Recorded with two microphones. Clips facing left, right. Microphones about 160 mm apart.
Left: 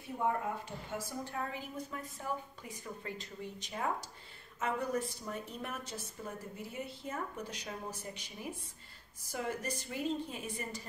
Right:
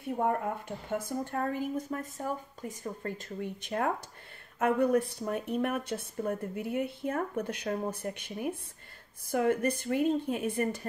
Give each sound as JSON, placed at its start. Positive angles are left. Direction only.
{"t": 0.0, "sound": "a woman's voice", "side_deg": -55}